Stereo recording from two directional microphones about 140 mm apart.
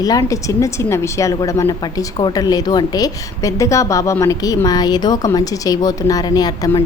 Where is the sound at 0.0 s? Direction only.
25° left (ahead or behind).